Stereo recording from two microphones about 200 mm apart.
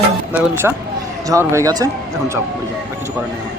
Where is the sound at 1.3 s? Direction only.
15° right (ahead or behind).